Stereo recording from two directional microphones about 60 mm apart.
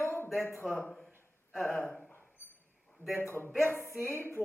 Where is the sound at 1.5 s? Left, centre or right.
Centre.